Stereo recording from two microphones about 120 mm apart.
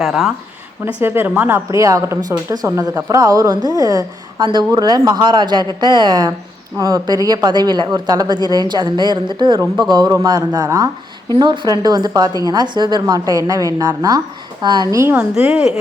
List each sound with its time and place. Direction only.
0.0 s a woman's voice: centre (ahead or behind)
1.0 s a woman's voice: 20° right (ahead or behind); by 14.8 s 35° right (ahead or behind)